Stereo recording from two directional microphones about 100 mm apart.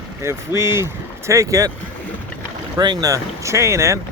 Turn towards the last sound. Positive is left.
turn(degrees=-30)  # may be behind; listen again after turning